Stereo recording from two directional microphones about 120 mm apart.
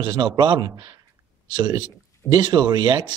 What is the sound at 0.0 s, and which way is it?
Speech, 40° right (ahead or behind).